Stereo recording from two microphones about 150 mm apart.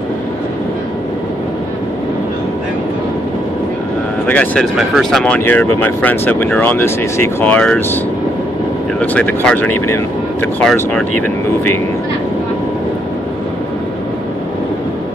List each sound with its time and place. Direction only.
4.3 s speech: 10° left (ahead or behind)
9.0 s speech: 10° left (ahead or behind)